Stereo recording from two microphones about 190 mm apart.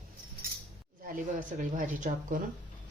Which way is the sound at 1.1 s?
45° right (ahead or behind).